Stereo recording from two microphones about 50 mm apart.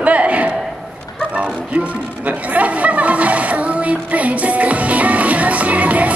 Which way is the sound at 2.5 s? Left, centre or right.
Right.